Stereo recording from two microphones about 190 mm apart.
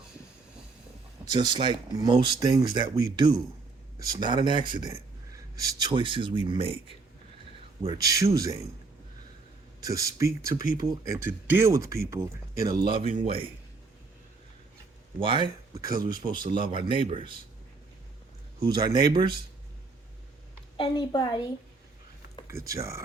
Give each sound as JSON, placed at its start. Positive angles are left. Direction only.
{"t": 1.2, "sound": "speech", "side_deg": -20}
{"t": 7.9, "sound": "speech", "side_deg": -20}
{"t": 9.8, "sound": "speech", "side_deg": -15}
{"t": 12.9, "sound": "speech", "side_deg": -30}
{"t": 15.2, "sound": "speech", "side_deg": -25}
{"t": 18.6, "sound": "speech", "side_deg": -20}
{"t": 20.7, "sound": "a woman's voice", "side_deg": 25}
{"t": 22.4, "sound": "speech", "side_deg": -15}